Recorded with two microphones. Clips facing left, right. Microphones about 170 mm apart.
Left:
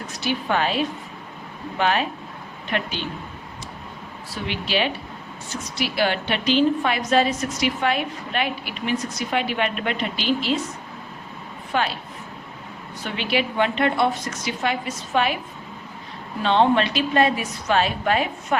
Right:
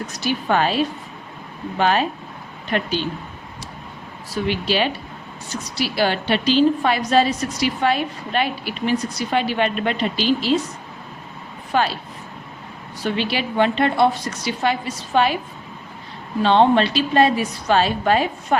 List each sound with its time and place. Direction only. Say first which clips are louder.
0.1 s a woman's voice: right 2 dB; 40° right (ahead or behind)
4.4 s a woman's voice: right 3 dB; 40° right (ahead or behind)
11.7 s a woman's voice: right 4 dB; 35° right (ahead or behind)
13.0 s a woman's voice: right 2 dB; 35° right (ahead or behind)
16.4 s a woman's voice: right 3 dB; 35° right (ahead or behind)